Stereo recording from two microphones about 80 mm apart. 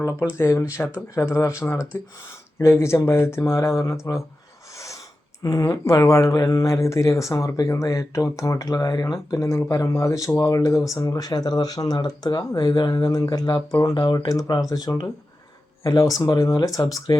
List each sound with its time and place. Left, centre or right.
0.3 s speech: left
5.4 s speech: left
14.3 s speech: left
16.0 s speech: left